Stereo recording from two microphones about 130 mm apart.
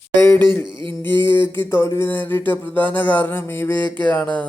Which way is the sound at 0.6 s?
40° right (ahead or behind).